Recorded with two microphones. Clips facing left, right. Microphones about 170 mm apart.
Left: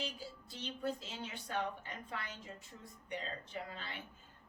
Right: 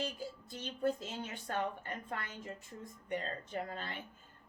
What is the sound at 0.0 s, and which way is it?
Speech, 50° right (ahead or behind).